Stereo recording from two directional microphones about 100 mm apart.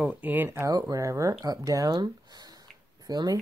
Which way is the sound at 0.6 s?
35° right (ahead or behind).